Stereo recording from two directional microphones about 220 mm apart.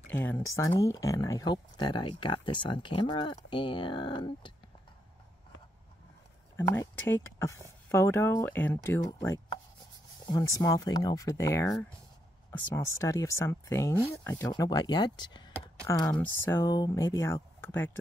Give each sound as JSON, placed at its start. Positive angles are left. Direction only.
{"t": 0.1, "sound": "speech", "side_deg": 10}
{"t": 6.5, "sound": "speech", "side_deg": 10}